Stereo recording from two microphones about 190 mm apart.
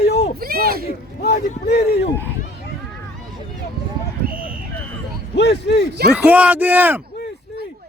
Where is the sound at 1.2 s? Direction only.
60° left (ahead or behind).